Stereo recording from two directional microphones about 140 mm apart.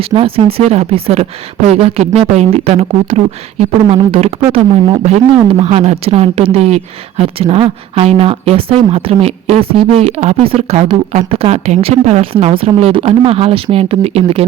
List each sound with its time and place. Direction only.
0.1 s speech: 40° right (ahead or behind)